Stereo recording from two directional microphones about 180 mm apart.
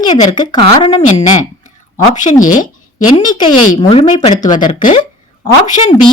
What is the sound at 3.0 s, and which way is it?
A woman's voice, 25° left (ahead or behind).